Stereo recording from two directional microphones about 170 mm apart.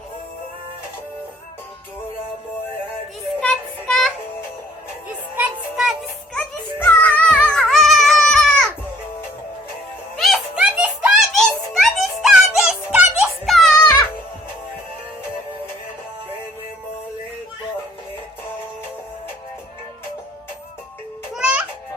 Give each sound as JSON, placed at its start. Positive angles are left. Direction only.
{"t": 3.4, "sound": "child singing", "side_deg": 5}
{"t": 5.0, "sound": "music", "side_deg": -5}
{"t": 6.3, "sound": "music", "side_deg": 10}
{"t": 10.2, "sound": "a sound", "side_deg": 0}
{"t": 21.3, "sound": "music", "side_deg": -5}